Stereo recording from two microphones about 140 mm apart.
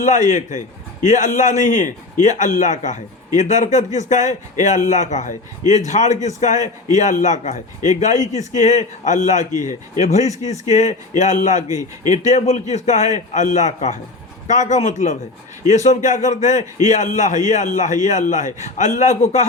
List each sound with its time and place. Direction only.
0.3 s a man's voice: 60° left (ahead or behind)